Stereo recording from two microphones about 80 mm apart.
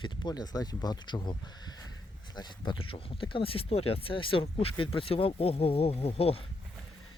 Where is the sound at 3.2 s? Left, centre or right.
Left.